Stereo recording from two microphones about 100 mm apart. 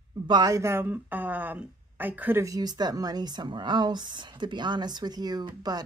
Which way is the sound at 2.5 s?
40° right (ahead or behind).